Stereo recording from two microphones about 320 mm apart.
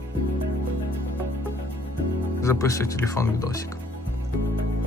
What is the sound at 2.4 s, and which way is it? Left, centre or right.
Speech, centre.